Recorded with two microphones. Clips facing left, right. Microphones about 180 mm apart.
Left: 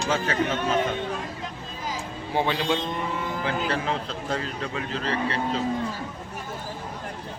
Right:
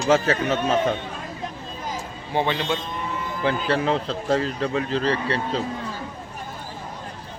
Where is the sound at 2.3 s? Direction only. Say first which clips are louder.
Right 1 dB; 5° left (ahead or behind).